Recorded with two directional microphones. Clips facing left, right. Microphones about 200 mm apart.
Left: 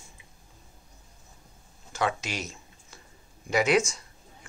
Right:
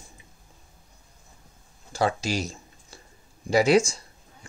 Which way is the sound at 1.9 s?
35° right (ahead or behind).